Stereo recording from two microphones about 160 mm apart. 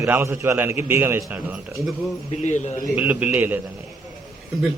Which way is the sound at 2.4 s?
45° left (ahead or behind).